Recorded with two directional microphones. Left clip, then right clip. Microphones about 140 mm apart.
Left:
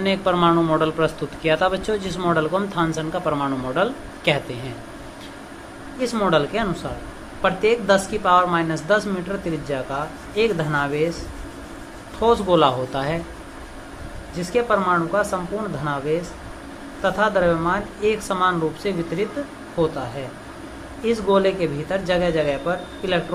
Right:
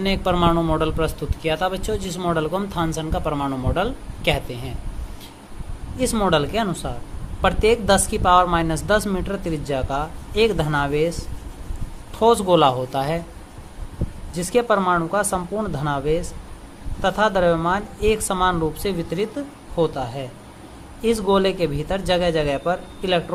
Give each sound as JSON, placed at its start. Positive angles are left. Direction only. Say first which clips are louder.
{"t": 0.0, "sound": "a man's voice", "louder": "left 1 dB", "side_deg": -50}
{"t": 6.0, "sound": "a woman's voice", "louder": "even", "side_deg": -60}
{"t": 12.2, "sound": "a man's voice", "louder": "right 1 dB", "side_deg": -60}
{"t": 14.3, "sound": "a woman's voice", "louder": "right 1 dB", "side_deg": -65}